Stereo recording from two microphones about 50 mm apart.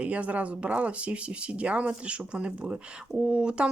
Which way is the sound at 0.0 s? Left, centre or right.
Right.